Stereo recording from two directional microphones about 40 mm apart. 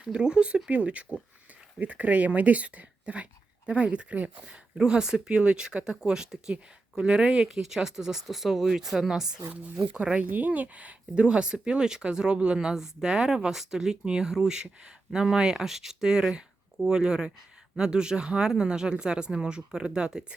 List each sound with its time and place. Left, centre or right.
0.0 s speech: right
4.4 s speech: right
10.2 s speech: right
11.1 s speech: right